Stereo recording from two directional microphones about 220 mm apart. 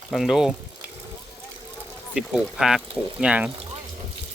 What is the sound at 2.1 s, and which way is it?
Speech, 5° right (ahead or behind).